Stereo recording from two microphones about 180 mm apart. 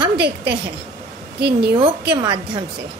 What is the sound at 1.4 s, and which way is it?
Speech, 65° right (ahead or behind).